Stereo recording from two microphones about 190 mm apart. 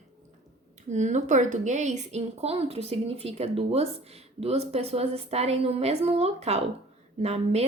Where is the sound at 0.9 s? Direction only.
40° right (ahead or behind).